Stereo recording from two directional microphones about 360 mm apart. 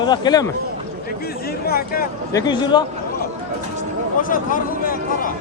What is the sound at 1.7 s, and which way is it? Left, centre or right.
Speech, left.